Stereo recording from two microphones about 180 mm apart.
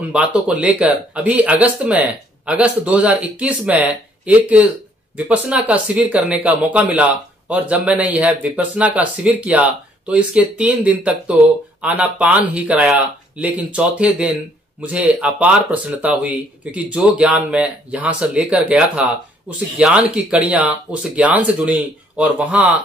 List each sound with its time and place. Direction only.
0.1 s speech: 5° right (ahead or behind)